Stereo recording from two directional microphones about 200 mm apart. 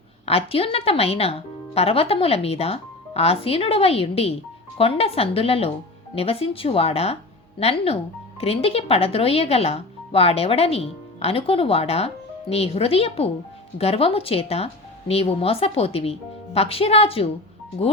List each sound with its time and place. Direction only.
0.3 s speech: 30° left (ahead or behind)